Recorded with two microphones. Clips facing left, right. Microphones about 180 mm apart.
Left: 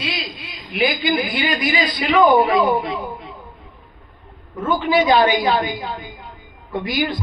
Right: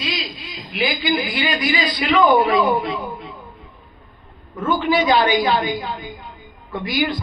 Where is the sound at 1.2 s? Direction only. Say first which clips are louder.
Left 1 dB; 55° left (ahead or behind).